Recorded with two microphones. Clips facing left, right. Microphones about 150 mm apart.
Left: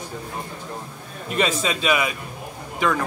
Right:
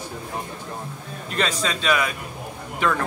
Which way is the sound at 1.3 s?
5° left (ahead or behind).